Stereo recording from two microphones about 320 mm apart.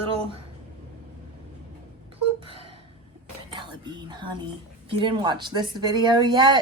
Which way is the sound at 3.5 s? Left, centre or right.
Centre.